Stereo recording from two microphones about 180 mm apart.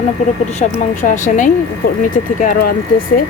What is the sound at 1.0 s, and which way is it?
Speech, 45° left (ahead or behind).